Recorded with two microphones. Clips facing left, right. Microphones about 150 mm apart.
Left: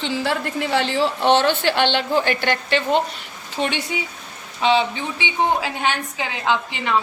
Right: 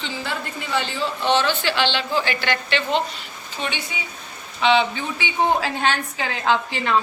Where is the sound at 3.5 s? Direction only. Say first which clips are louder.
Left 5 dB; 70° left (ahead or behind).